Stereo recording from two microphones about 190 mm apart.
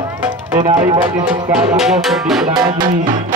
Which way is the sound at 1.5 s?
5° right (ahead or behind).